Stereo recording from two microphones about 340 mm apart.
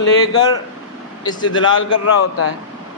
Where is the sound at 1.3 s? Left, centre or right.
Centre.